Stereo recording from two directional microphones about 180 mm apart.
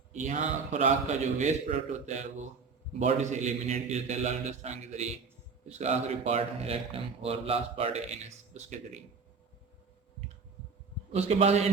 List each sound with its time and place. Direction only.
0.1 s a man's voice: 40° right (ahead or behind)
11.1 s a man's voice: 35° right (ahead or behind)